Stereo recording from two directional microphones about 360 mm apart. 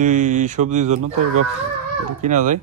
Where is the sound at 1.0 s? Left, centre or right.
Right.